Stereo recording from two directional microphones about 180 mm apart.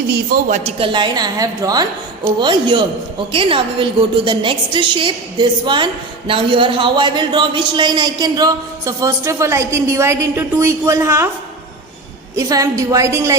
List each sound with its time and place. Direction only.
0.3 s a man's voice: 55° right (ahead or behind)
0.6 s a woman's voice: 30° right (ahead or behind)
12.4 s a woman's voice: 20° right (ahead or behind)